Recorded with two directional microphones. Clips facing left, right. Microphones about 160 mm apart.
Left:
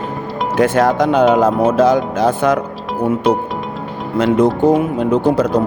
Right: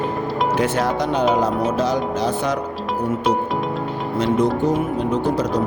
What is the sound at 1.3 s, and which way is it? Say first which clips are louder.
Speech: left 7 dB; 55° left (ahead or behind).